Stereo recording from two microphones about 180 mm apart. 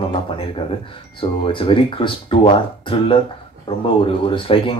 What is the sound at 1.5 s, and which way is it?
Speech, 30° left (ahead or behind).